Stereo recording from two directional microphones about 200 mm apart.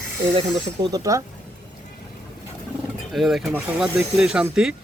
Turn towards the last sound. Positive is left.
turn(degrees=-5)  # may be behind; listen again after turning